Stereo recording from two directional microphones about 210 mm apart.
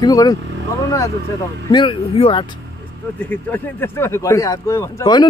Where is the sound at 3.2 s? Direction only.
10° left (ahead or behind).